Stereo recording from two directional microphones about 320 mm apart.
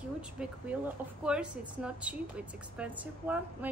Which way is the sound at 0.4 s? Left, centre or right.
Centre.